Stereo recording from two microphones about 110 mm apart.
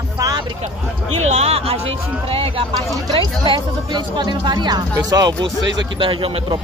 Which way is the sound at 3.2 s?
45° right (ahead or behind).